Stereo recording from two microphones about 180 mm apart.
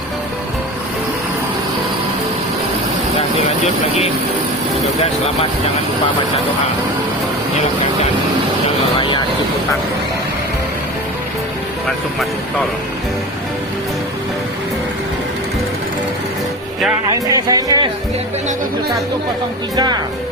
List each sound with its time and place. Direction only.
3.6 s speech: 35° left (ahead or behind)
9.0 s vehicle: 30° left (ahead or behind)
17.1 s speech: 20° right (ahead or behind)
19.7 s speech: 25° right (ahead or behind)